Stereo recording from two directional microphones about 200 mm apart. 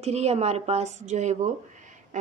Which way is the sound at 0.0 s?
30° right (ahead or behind).